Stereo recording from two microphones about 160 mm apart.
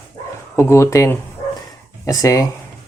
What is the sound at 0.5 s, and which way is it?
Speech, 15° left (ahead or behind).